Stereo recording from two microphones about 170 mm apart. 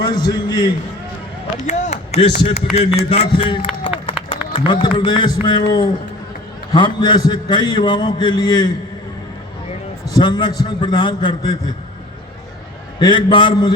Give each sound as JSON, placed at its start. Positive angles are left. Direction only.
{"t": 0.0, "sound": "a man's voice", "side_deg": 25}
{"t": 1.6, "sound": "a man's voice", "side_deg": 45}
{"t": 10.2, "sound": "a man's voice", "side_deg": 25}
{"t": 13.0, "sound": "a man's voice", "side_deg": 30}